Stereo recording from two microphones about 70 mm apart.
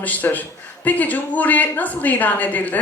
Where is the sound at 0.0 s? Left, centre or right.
Left.